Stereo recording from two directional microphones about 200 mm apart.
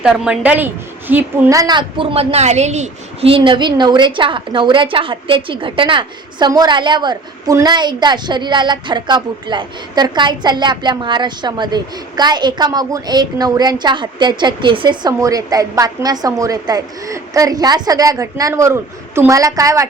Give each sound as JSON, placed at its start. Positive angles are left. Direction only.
{"t": 0.0, "sound": "a woman's voice", "side_deg": -5}